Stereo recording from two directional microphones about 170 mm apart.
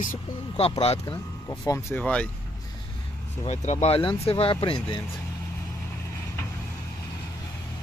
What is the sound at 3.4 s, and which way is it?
Speech, 40° left (ahead or behind).